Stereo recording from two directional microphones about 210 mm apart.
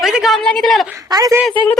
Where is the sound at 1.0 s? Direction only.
15° right (ahead or behind).